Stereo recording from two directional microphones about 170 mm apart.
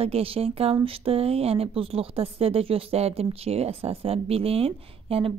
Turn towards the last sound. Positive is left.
turn(degrees=-35)  # may be behind; listen again after turning